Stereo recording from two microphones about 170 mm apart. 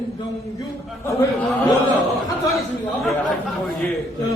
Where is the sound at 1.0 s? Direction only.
15° left (ahead or behind).